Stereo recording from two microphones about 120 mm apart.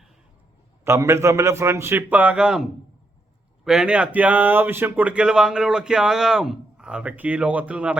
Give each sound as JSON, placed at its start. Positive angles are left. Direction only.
{"t": 0.9, "sound": "a man's voice", "side_deg": -25}